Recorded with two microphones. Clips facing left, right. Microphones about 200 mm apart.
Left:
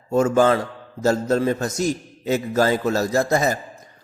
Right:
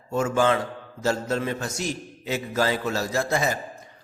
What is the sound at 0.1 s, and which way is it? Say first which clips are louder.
A man's voice: left 5 dB; 40° left (ahead or behind).